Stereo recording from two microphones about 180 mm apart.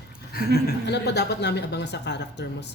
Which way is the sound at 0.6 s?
65° left (ahead or behind).